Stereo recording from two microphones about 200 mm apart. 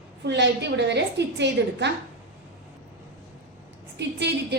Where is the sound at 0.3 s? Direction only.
60° right (ahead or behind).